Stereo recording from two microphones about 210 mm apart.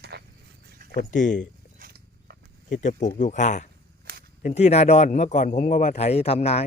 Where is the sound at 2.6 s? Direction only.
35° left (ahead or behind).